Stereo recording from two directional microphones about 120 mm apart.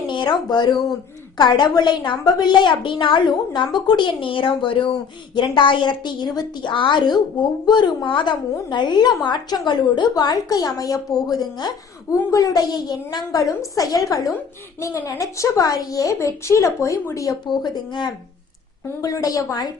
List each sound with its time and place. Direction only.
0.1 s a woman's voice: 40° left (ahead or behind)
17.5 s a woman's voice: 40° left (ahead or behind)